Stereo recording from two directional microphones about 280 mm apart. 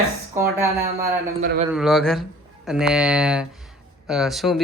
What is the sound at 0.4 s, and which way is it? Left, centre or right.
Speech, centre.